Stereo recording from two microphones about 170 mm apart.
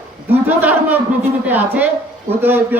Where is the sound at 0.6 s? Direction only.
10° right (ahead or behind).